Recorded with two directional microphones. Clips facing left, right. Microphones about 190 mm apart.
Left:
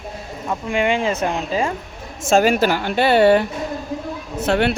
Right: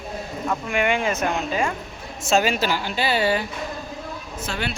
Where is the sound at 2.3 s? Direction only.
50° left (ahead or behind).